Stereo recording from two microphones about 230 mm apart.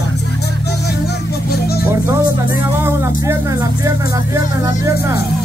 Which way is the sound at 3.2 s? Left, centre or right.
Centre.